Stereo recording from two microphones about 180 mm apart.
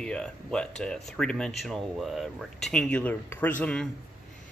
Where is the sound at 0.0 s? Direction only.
5° left (ahead or behind).